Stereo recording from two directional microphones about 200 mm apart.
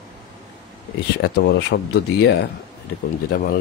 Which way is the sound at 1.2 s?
55° left (ahead or behind).